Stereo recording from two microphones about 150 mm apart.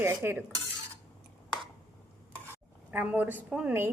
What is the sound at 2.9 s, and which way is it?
A woman's voice, 10° right (ahead or behind).